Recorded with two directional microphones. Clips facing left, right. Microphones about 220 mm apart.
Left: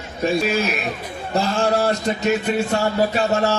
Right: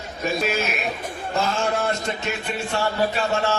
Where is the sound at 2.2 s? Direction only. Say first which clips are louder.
Left 8 dB; 40° left (ahead or behind).